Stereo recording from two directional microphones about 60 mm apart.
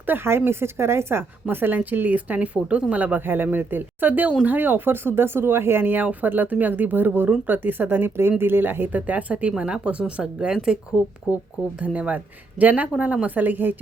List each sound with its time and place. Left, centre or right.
0.0 s speech: right
1.5 s speech: right; by 10.8 s centre
11.8 s speech: right